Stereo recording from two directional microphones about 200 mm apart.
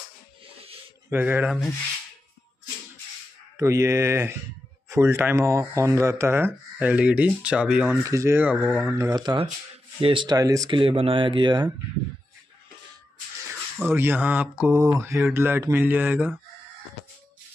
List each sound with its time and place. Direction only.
1.1 s speech: 10° right (ahead or behind)
3.5 s speech: 15° right (ahead or behind)
13.8 s speech: 10° right (ahead or behind)